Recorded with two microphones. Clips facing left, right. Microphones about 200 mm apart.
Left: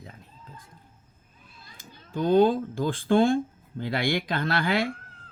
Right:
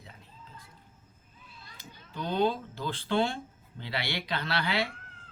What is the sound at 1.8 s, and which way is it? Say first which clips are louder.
Speech: left 10 dB; 50° left (ahead or behind).